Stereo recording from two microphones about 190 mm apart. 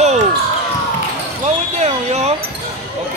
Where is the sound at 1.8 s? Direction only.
35° right (ahead or behind).